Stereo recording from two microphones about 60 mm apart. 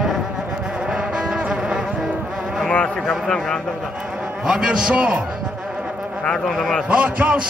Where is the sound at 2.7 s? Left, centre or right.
Centre.